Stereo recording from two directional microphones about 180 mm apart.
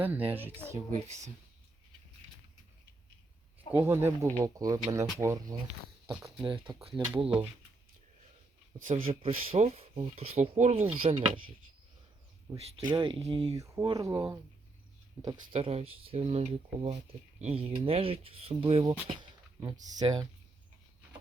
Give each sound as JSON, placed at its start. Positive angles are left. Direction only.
{"t": 0.0, "sound": "speech", "side_deg": -10}
{"t": 0.7, "sound": "speech", "side_deg": -40}
{"t": 3.7, "sound": "speech", "side_deg": -15}
{"t": 9.1, "sound": "speech", "side_deg": -30}
{"t": 12.7, "sound": "speech", "side_deg": -25}
{"t": 13.6, "sound": "speech", "side_deg": -20}